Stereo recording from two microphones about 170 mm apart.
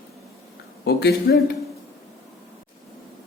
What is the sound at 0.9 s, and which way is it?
Speech, 75° left (ahead or behind).